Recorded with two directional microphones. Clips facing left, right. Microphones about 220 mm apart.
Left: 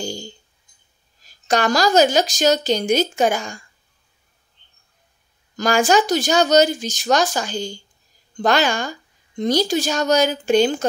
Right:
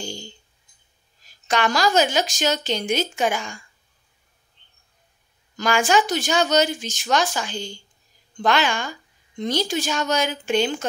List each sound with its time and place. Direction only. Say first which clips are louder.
0.0 s a sound: left 5 dB; 40° left (ahead or behind)
1.2 s speech: left 3 dB; 40° left (ahead or behind)
5.6 s speech: left 3 dB; 40° left (ahead or behind)